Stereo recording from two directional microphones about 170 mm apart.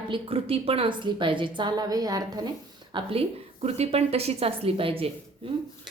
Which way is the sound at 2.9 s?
35° right (ahead or behind).